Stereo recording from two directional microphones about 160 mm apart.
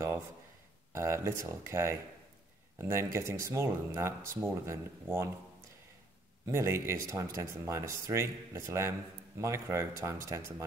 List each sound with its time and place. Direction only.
0.9 s speech: 20° right (ahead or behind)
6.4 s speech: 15° right (ahead or behind)